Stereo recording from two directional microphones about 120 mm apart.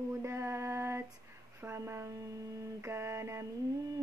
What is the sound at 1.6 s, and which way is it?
Music, 20° right (ahead or behind).